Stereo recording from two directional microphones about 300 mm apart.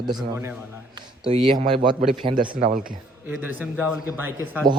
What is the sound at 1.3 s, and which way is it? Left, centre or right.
A man's voice, centre.